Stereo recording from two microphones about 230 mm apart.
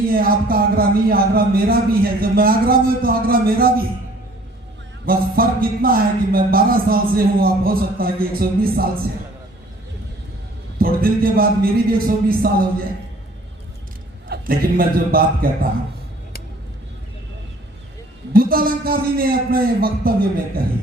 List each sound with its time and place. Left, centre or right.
0.1 s speech: right
5.0 s speech: right
10.8 s speech: right
14.3 s speech: right
18.3 s speech: right